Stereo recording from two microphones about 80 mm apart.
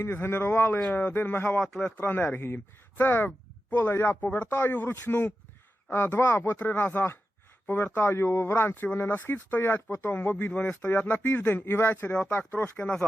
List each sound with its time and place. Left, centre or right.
0.0 s speech: left
1.5 s speech: centre
2.0 s speech: left
12.1 s speech: centre